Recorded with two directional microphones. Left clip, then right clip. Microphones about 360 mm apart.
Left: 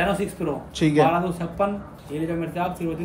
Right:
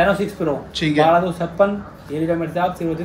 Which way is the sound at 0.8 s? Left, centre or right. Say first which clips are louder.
Right 2 dB; centre.